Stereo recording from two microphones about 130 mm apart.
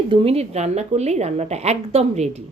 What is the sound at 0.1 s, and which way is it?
Speech, 45° right (ahead or behind).